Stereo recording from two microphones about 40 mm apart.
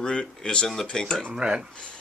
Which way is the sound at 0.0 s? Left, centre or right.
Left.